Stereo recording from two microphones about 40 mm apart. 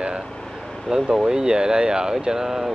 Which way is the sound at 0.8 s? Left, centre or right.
Centre.